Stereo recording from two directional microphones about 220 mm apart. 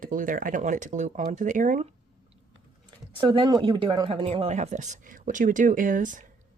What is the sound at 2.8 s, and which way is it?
Speech, 20° right (ahead or behind).